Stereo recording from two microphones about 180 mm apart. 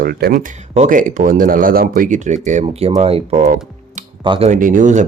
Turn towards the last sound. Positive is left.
turn(degrees=-45)  # may be behind; listen again after turning